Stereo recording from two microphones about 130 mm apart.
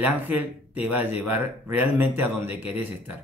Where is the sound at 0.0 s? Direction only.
15° right (ahead or behind).